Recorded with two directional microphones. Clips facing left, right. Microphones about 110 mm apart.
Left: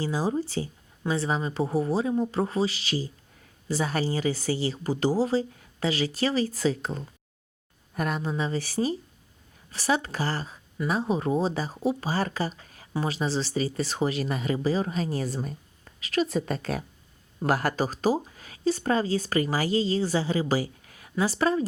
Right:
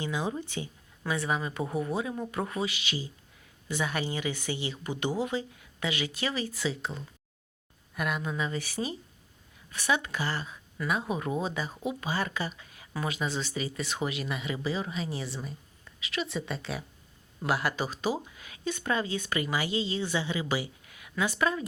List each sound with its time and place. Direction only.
0.0 s speech: 35° left (ahead or behind)